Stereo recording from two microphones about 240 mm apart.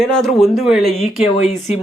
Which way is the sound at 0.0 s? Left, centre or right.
Centre.